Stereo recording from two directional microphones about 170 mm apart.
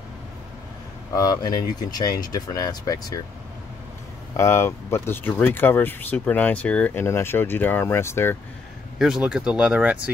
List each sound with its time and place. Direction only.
1.1 s speech: 25° left (ahead or behind)
4.4 s speech: 15° left (ahead or behind)
8.9 s speech: 5° right (ahead or behind)